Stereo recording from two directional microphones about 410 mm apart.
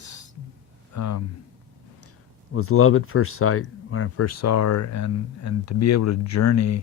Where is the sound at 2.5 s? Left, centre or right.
Left.